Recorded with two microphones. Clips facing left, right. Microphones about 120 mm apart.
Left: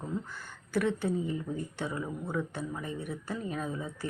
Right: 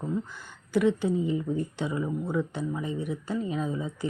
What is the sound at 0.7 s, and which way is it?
Speech, 15° right (ahead or behind).